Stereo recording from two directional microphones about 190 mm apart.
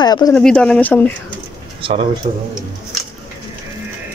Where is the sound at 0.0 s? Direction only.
20° left (ahead or behind).